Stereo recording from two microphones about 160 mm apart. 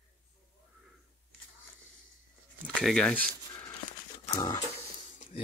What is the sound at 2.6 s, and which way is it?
Speech, 5° left (ahead or behind).